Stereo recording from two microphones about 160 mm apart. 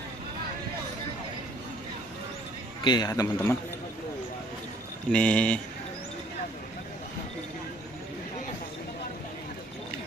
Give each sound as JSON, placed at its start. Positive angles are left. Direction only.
{"t": 2.8, "sound": "a man's voice", "side_deg": 25}
{"t": 5.1, "sound": "speech", "side_deg": 5}